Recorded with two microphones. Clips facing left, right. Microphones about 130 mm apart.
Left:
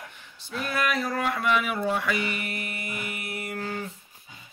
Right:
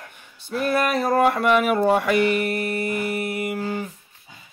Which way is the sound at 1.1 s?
50° right (ahead or behind).